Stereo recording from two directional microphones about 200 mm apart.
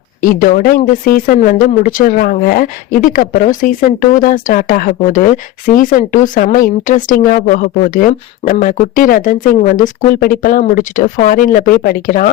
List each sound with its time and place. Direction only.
0.2 s speech: 45° left (ahead or behind)